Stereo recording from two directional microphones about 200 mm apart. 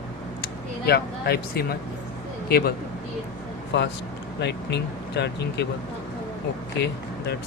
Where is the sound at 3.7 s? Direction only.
60° left (ahead or behind).